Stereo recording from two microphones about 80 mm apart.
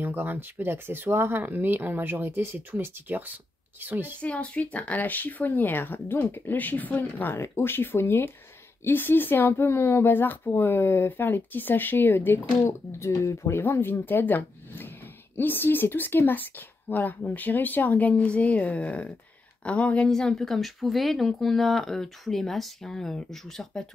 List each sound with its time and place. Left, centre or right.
0.0 s speech: right
4.2 s speech: centre
20.1 s speech: centre